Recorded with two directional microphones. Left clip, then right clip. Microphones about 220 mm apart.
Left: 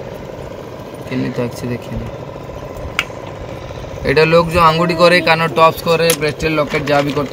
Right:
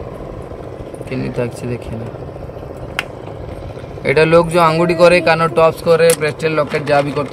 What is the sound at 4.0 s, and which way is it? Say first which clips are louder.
Speech: even; 20° right (ahead or behind).